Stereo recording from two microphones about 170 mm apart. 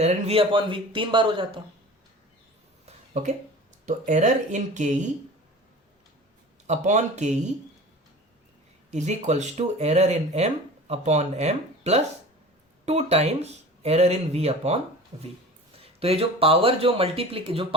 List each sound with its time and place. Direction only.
0.0 s speech: 35° right (ahead or behind)
2.8 s a sound: 40° right (ahead or behind)
3.8 s speech: 45° right (ahead or behind)
6.7 s speech: 45° right (ahead or behind)
8.9 s speech: 40° right (ahead or behind)